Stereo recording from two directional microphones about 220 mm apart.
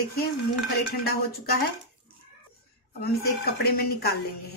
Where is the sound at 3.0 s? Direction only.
45° left (ahead or behind).